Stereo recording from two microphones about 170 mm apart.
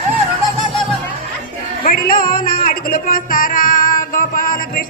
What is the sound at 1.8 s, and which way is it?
Music, 60° left (ahead or behind).